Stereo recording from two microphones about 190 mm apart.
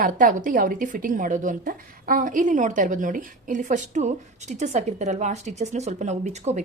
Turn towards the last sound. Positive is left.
turn(degrees=-35)  # may be behind; listen again after turning